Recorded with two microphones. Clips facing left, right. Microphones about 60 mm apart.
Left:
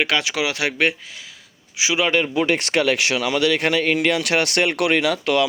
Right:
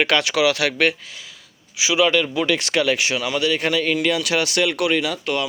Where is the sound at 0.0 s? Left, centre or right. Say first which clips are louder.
Right 3 dB; centre.